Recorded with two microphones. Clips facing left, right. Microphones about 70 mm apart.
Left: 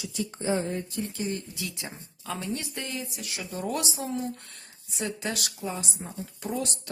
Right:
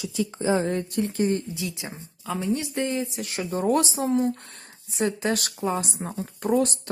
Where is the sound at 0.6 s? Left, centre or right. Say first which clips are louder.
Right 6 dB; right.